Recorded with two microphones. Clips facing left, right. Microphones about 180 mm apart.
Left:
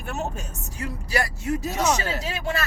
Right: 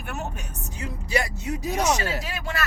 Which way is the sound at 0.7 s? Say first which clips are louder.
Even; 20° right (ahead or behind).